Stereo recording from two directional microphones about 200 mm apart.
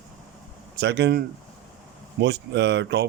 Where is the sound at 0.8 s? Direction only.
60° right (ahead or behind).